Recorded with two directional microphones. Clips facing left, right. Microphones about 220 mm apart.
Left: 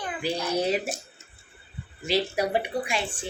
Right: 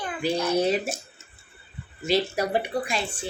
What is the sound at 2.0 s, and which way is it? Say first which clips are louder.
A woman's voice: right 1 dB; 15° left (ahead or behind).